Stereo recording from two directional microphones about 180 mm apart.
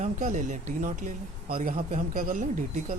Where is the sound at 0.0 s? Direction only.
45° right (ahead or behind).